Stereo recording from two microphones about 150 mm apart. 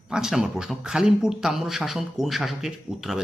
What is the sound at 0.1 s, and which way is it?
Speech, 5° right (ahead or behind).